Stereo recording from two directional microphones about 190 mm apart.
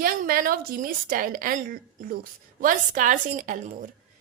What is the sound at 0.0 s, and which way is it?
A woman's voice, 50° right (ahead or behind).